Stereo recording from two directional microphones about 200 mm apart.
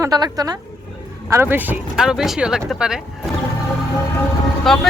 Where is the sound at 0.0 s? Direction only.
20° right (ahead or behind); by 3.0 s 5° right (ahead or behind).